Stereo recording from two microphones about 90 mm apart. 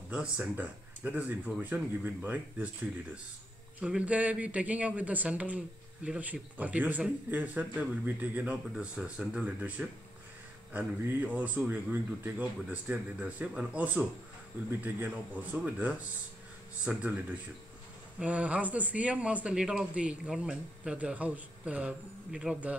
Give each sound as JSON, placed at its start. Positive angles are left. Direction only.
{"t": 0.1, "sound": "speech", "side_deg": -10}
{"t": 18.2, "sound": "speech", "side_deg": -15}